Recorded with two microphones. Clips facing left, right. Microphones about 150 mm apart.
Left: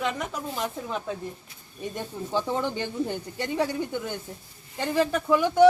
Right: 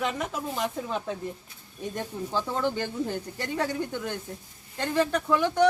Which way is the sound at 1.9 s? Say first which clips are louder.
Left 1 dB; 15° left (ahead or behind).